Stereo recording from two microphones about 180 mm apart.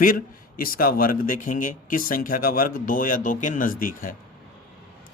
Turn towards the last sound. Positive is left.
turn(degrees=50)  # may be behind; listen again after turning